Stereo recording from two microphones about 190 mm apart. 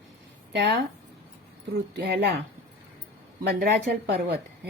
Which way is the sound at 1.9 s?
60° right (ahead or behind).